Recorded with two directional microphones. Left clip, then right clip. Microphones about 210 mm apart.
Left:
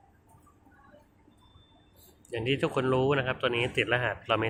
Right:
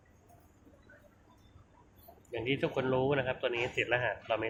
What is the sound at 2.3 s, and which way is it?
Speech, 15° left (ahead or behind).